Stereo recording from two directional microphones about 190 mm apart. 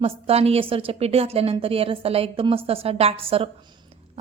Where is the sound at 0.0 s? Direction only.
30° right (ahead or behind).